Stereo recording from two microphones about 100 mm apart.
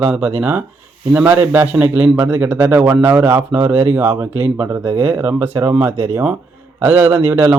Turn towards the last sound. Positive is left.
turn(degrees=-20)  # may be behind; listen again after turning